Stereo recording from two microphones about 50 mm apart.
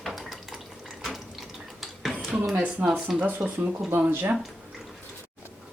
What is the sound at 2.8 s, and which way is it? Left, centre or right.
Speech, right.